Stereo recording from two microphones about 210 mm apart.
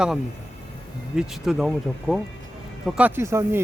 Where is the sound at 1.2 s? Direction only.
5° right (ahead or behind).